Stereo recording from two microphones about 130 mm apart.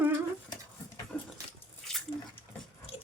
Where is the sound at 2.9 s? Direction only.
50° left (ahead or behind).